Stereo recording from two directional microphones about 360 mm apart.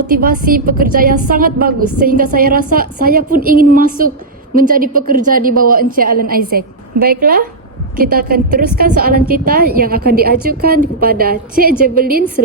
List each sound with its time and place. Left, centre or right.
0.1 s a woman's voice: right